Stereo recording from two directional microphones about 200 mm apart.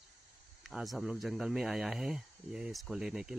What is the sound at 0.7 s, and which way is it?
Speech, centre (ahead or behind).